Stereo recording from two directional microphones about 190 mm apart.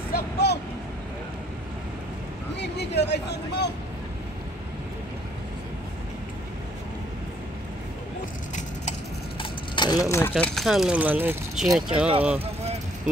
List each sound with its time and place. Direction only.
0.1 s vehicle: 60° left (ahead or behind)
2.5 s speech: 65° left (ahead or behind)
9.4 s a sound: 20° left (ahead or behind)
10.4 s speech: centre (ahead or behind)